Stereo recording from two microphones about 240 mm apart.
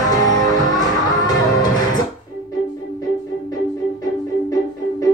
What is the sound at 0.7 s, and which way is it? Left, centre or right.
Music, centre.